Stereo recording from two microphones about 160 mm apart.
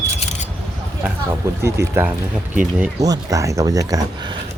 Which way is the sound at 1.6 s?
15° right (ahead or behind).